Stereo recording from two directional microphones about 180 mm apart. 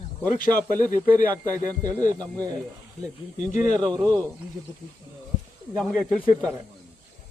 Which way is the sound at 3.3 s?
45° left (ahead or behind).